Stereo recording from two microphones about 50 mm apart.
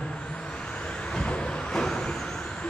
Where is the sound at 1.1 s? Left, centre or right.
Left.